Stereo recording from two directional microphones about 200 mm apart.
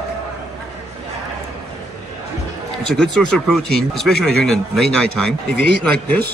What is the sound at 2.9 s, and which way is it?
Speech, 5° left (ahead or behind).